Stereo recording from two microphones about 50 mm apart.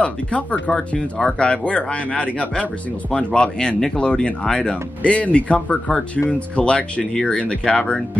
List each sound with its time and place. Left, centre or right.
0.0 s speech: left
0.7 s speech: centre